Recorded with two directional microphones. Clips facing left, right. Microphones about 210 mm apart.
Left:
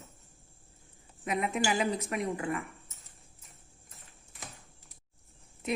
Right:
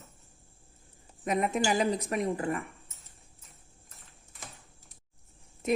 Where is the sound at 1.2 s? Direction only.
45° right (ahead or behind).